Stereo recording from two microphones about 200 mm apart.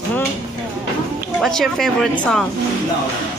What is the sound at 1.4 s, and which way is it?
Speech, centre (ahead or behind).